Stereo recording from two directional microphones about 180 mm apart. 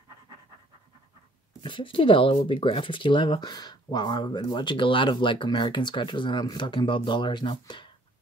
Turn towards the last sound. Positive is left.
turn(degrees=25)  # may be behind; listen again after turning